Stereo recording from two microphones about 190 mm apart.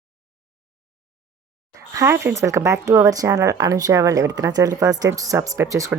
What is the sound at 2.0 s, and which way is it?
Speech, 15° right (ahead or behind).